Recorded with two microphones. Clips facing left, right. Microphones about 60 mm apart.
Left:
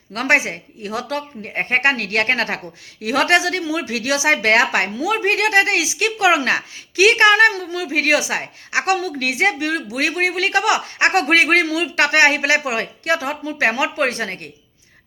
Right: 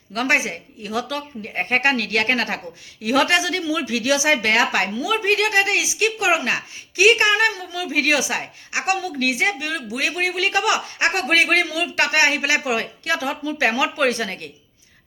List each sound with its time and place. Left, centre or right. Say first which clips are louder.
0.1 s speech: left 3 dB; left
3.0 s speech: left 2 dB; left
5.8 s a woman's voice: left 3 dB; left
8.9 s a woman's voice: left 2 dB; left
9.1 s a woman's voice: left 2 dB; left